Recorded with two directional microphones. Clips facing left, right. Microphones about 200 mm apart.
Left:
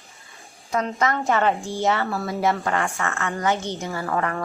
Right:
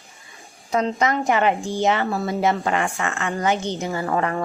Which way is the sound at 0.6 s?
20° right (ahead or behind).